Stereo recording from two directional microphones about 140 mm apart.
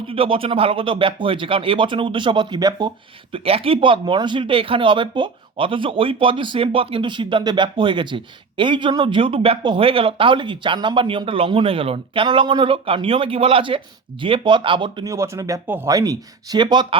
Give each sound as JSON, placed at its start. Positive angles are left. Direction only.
{"t": 0.1, "sound": "speech", "side_deg": -40}
{"t": 3.3, "sound": "speech", "side_deg": -45}
{"t": 15.0, "sound": "speech", "side_deg": -20}
{"t": 15.9, "sound": "speech", "side_deg": -25}